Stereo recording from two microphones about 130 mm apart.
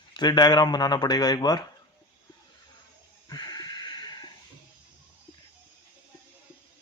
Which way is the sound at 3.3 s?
30° left (ahead or behind).